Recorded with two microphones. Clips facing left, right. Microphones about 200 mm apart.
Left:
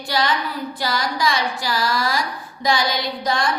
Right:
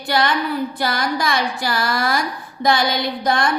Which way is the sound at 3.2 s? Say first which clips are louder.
Right 3 dB; 55° right (ahead or behind).